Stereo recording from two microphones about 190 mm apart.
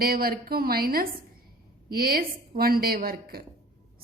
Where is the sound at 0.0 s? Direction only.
50° right (ahead or behind).